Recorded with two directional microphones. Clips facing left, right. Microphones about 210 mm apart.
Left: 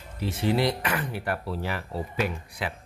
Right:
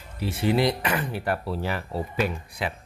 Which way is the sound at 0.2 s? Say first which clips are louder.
Right 2 dB; 10° right (ahead or behind).